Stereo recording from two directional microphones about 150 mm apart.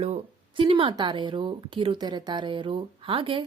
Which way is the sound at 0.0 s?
40° right (ahead or behind).